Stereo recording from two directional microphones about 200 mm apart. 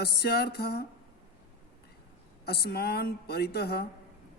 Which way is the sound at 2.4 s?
55° left (ahead or behind).